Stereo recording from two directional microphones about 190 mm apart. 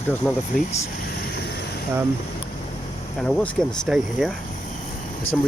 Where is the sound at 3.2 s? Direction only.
5° left (ahead or behind).